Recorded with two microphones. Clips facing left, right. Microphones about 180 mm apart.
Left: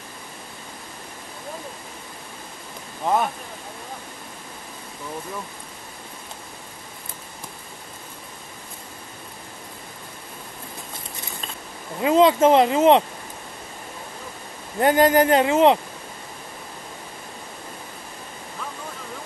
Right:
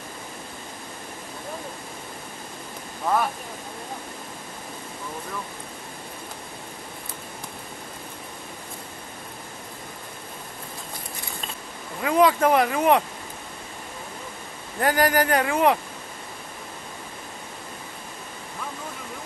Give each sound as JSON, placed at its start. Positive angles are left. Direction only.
{"t": 3.1, "sound": "speech", "side_deg": 20}
{"t": 12.0, "sound": "speech", "side_deg": 25}
{"t": 14.8, "sound": "speech", "side_deg": 20}